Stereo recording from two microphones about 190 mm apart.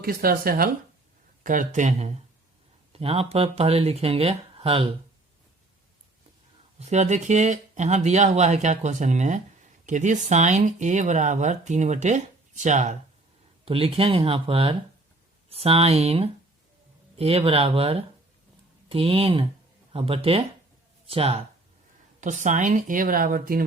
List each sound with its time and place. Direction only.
0.0 s speech: 50° right (ahead or behind); by 4.9 s 30° right (ahead or behind)
6.7 s speech: 35° right (ahead or behind)
22.2 s speech: 40° right (ahead or behind)